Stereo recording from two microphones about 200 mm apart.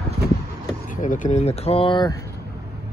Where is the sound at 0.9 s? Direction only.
40° left (ahead or behind); by 2.1 s 25° left (ahead or behind).